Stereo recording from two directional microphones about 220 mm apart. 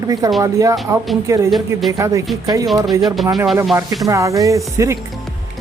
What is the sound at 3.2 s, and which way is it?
Speech, centre (ahead or behind).